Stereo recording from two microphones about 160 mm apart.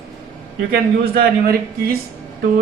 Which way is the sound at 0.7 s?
70° right (ahead or behind).